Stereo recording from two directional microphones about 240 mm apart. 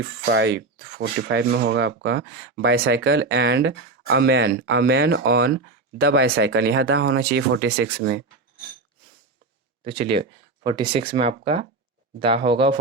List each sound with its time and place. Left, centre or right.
0.3 s speech: right
9.8 s speech: right